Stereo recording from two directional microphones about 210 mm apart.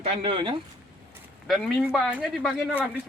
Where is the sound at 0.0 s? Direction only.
25° right (ahead or behind).